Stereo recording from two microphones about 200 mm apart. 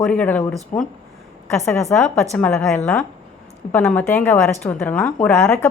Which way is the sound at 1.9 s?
Centre (ahead or behind).